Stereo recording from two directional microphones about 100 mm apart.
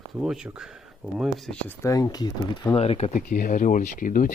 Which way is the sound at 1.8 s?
35° left (ahead or behind).